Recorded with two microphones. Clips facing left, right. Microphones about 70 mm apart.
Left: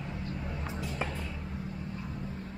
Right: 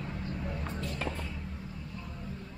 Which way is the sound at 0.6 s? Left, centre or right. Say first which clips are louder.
Left 1 dB; centre.